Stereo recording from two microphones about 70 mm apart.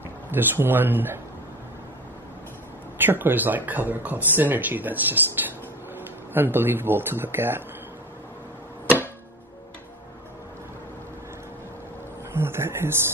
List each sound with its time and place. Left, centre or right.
0.3 s speech: right
3.0 s speech: right
12.3 s speech: right